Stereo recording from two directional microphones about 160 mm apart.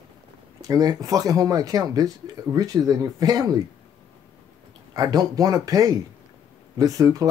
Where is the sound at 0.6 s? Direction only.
25° right (ahead or behind).